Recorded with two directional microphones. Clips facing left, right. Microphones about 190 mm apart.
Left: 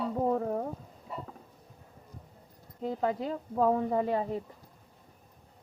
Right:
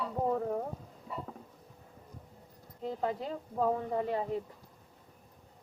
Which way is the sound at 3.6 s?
45° left (ahead or behind).